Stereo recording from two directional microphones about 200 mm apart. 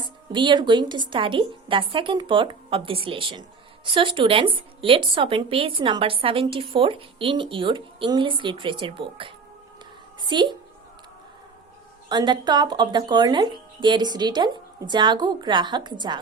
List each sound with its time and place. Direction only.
0.0 s a woman's voice: 25° right (ahead or behind)
12.0 s speech: 20° right (ahead or behind)